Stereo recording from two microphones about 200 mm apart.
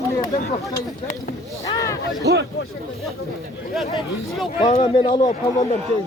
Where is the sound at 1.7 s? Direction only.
15° left (ahead or behind).